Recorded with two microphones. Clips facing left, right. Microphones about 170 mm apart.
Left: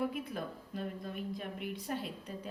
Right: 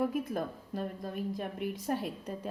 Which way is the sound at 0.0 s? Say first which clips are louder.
Right 5 dB; 45° right (ahead or behind).